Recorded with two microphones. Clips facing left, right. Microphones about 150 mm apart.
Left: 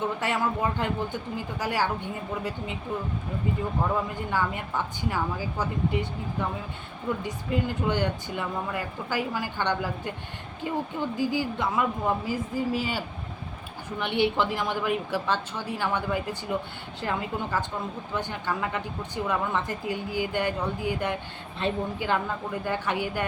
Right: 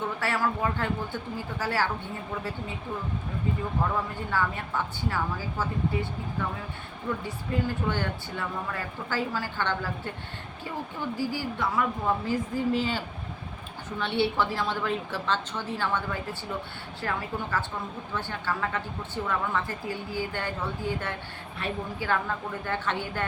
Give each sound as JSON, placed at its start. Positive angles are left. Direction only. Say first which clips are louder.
{"t": 0.2, "sound": "speech", "louder": "left 1 dB", "side_deg": 20}
{"t": 4.3, "sound": "a woman's voice", "louder": "left 1 dB", "side_deg": 15}
{"t": 7.3, "sound": "a woman's voice", "louder": "left 1 dB", "side_deg": 20}
{"t": 11.2, "sound": "a woman's voice", "louder": "left 3 dB", "side_deg": 20}
{"t": 14.0, "sound": "a woman's voice", "louder": "left 1 dB", "side_deg": 15}